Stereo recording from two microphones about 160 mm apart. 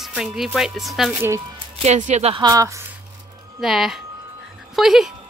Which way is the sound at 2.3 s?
20° right (ahead or behind).